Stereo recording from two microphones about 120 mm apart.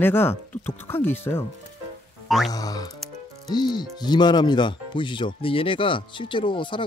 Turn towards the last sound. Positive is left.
turn(degrees=45)  # may be behind; listen again after turning